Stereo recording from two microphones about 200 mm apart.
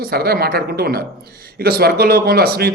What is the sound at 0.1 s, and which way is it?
Speech, 50° right (ahead or behind).